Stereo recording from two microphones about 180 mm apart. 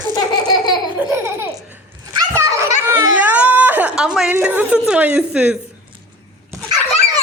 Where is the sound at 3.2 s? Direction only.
10° right (ahead or behind).